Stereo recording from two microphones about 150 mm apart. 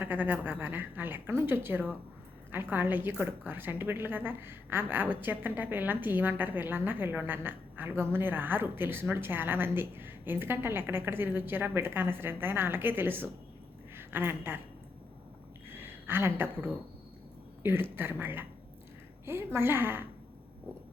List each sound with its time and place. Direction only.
0.0 s a woman's voice: 10° right (ahead or behind)
15.8 s a woman's voice: 15° right (ahead or behind)